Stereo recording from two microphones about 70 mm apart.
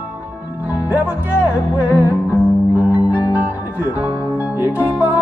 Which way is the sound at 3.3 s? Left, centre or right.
Right.